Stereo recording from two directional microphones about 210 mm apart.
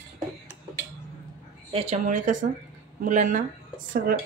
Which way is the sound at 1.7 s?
35° right (ahead or behind).